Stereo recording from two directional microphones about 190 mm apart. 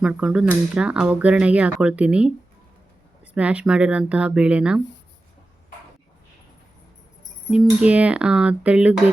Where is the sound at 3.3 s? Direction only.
5° right (ahead or behind).